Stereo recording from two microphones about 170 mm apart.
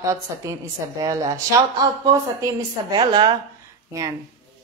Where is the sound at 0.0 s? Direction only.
20° right (ahead or behind).